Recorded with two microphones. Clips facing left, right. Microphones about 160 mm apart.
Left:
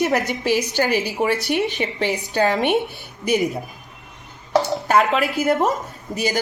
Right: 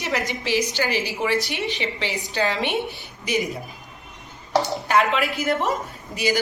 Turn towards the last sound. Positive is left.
turn(degrees=45)  # may be behind; listen again after turning